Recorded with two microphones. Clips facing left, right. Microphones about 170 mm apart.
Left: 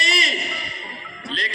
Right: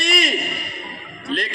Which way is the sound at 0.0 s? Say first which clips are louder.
Right 4 dB; 55° right (ahead or behind).